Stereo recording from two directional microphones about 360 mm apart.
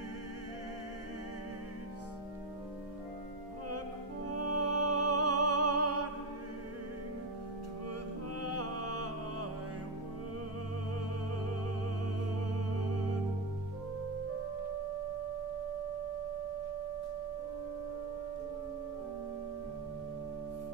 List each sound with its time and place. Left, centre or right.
4.3 s music: right
8.4 s music: right